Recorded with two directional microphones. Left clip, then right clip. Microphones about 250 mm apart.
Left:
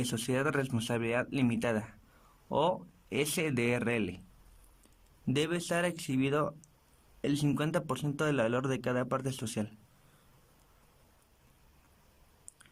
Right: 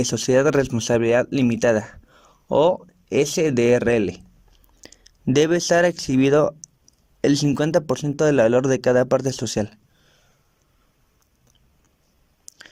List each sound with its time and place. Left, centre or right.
0.0 s speech: centre